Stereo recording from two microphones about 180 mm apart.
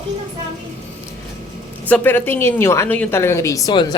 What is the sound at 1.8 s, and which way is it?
A woman's voice, 10° left (ahead or behind).